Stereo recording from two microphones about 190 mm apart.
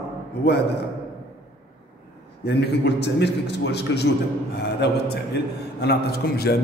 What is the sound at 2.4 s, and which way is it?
A man's voice, 60° left (ahead or behind).